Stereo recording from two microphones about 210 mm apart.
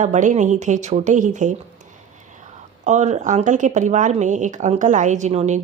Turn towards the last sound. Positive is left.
turn(degrees=-30)  # may be behind; listen again after turning